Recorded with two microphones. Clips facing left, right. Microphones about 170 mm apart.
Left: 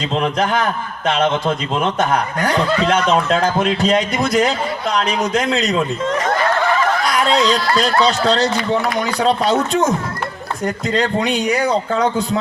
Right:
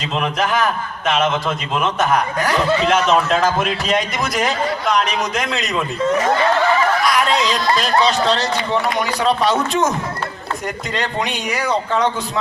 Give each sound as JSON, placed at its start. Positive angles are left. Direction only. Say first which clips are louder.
{"t": 0.1, "sound": "a man's voice", "louder": "left 1 dB", "side_deg": 35}
{"t": 6.1, "sound": "speech", "louder": "right 2 dB", "side_deg": -5}
{"t": 7.0, "sound": "a sound", "louder": "left 1 dB", "side_deg": 30}
{"t": 7.8, "sound": "a man's voice", "louder": "even", "side_deg": 35}
{"t": 10.9, "sound": "a man's voice", "louder": "left 5 dB", "side_deg": 35}